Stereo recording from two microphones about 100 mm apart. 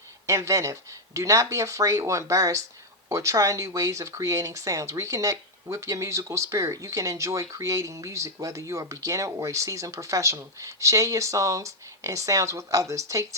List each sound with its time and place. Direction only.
0.3 s speech: 30° right (ahead or behind)